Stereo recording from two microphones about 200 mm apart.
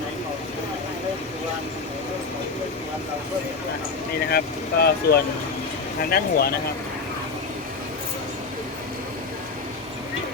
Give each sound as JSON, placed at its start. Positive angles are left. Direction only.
{"t": 4.3, "sound": "speech", "side_deg": 50}